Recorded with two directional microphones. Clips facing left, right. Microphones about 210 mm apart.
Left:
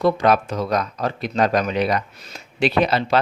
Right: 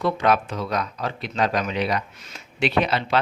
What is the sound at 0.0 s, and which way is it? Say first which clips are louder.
Speech: left 4 dB; 40° left (ahead or behind).